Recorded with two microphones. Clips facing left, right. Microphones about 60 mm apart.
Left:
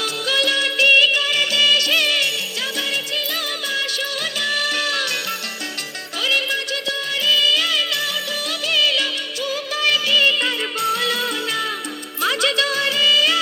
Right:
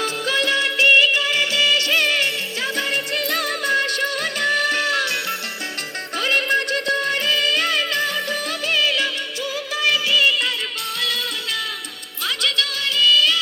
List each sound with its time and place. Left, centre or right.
0.0 s music: right
2.7 s music: right
6.1 s music: right; by 10.5 s centre
10.8 s music: centre